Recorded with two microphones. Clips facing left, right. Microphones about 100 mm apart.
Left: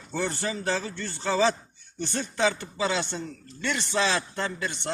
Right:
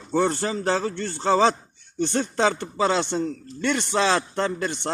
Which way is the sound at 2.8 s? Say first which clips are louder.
Right 6 dB; 40° right (ahead or behind).